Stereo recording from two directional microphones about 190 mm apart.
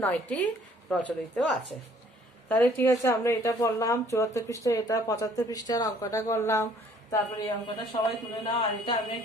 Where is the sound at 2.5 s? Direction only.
10° left (ahead or behind).